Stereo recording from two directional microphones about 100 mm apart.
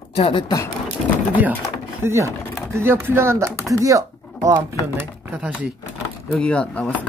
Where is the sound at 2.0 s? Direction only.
30° right (ahead or behind).